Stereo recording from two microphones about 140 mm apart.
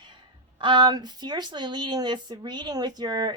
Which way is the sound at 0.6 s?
35° right (ahead or behind).